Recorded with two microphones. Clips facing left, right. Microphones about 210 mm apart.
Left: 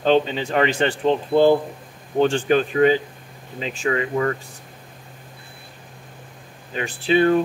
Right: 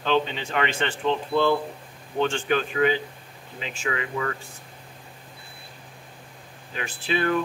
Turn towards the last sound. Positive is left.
turn(degrees=35)  # may be behind; listen again after turning